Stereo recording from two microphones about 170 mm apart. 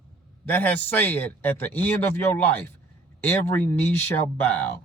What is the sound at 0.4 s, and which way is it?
A man's voice, 10° left (ahead or behind).